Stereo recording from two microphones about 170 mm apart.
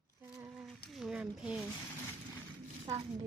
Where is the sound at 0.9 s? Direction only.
5° right (ahead or behind).